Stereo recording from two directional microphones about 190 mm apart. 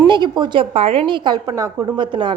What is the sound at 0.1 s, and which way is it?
A woman's voice, 25° right (ahead or behind).